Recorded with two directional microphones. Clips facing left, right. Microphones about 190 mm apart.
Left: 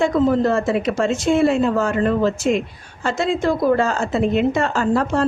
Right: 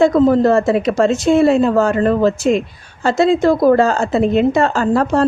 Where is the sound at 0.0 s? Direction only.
40° right (ahead or behind).